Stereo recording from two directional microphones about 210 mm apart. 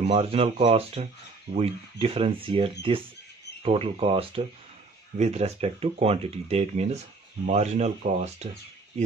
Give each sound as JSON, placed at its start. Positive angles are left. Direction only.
{"t": 0.1, "sound": "speech", "side_deg": -25}